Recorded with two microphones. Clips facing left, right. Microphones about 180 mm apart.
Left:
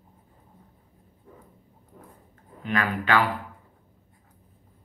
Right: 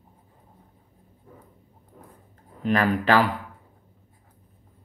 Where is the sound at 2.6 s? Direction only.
35° right (ahead or behind).